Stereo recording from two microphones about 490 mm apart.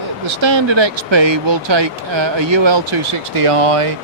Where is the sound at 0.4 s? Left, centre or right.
Right.